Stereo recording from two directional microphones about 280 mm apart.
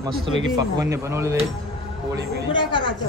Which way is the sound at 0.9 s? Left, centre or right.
Centre.